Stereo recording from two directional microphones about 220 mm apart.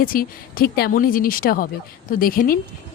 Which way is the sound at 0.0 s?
40° left (ahead or behind).